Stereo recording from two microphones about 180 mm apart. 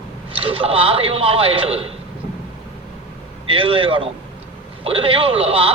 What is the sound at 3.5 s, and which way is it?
Speech, 30° right (ahead or behind).